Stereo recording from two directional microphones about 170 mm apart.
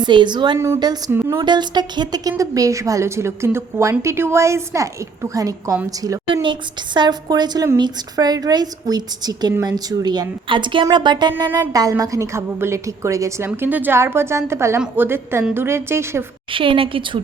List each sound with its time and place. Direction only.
0.0 s a woman's voice: 25° right (ahead or behind)
1.4 s a woman's voice: 25° right (ahead or behind)
16.5 s a woman's voice: 30° right (ahead or behind)